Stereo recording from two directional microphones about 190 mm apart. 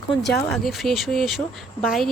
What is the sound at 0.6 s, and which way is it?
Speech, centre (ahead or behind).